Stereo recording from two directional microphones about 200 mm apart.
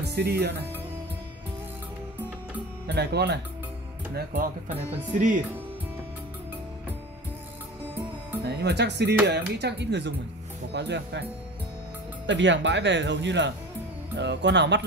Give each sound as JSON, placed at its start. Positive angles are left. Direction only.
{"t": 0.0, "sound": "speech", "side_deg": -55}
{"t": 2.9, "sound": "speech", "side_deg": -55}
{"t": 8.5, "sound": "speech", "side_deg": -55}
{"t": 12.3, "sound": "speech", "side_deg": -65}